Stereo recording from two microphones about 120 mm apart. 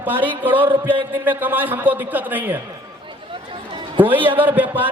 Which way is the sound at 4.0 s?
15° right (ahead or behind).